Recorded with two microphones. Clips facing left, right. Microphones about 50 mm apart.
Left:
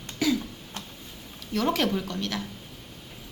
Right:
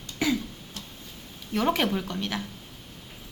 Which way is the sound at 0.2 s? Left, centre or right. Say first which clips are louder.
Left 1 dB; right.